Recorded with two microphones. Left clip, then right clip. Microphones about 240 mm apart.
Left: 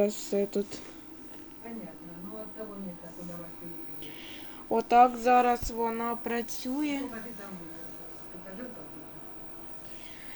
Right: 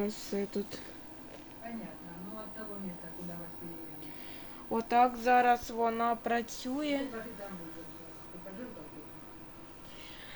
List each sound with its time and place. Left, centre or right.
0.0 s speech: centre
4.7 s speech: centre